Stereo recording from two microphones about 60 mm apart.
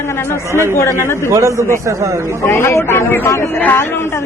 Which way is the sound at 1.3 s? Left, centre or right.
Right.